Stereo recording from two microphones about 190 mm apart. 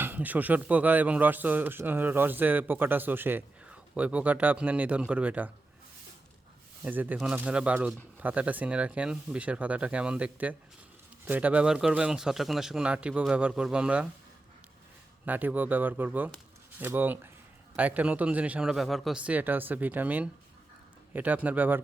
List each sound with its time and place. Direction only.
0.0 s a man's voice: 10° right (ahead or behind)
6.8 s a man's voice: 10° right (ahead or behind)
15.3 s a man's voice: 10° right (ahead or behind)